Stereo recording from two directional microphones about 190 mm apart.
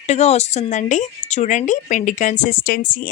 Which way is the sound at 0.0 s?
35° left (ahead or behind).